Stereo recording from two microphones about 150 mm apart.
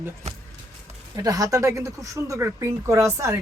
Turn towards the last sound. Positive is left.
turn(degrees=-20)  # may be behind; listen again after turning